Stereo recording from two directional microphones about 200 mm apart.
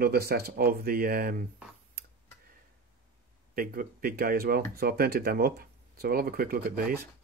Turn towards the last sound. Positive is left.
turn(degrees=-45)  # may be behind; listen again after turning